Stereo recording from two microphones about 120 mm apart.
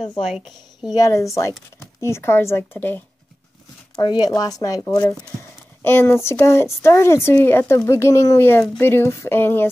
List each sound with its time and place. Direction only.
0.9 s speech: 25° left (ahead or behind)
3.9 s speech: 35° left (ahead or behind); by 9.7 s 20° left (ahead or behind)